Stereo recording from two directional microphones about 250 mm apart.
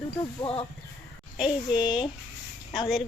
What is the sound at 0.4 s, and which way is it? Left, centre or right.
Speech, left.